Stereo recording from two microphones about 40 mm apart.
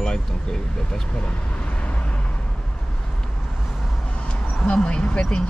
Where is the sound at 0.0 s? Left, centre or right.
Centre.